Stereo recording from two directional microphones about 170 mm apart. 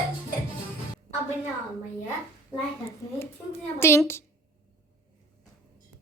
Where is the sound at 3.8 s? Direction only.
15° left (ahead or behind).